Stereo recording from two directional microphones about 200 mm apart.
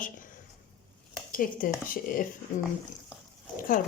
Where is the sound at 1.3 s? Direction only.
45° left (ahead or behind).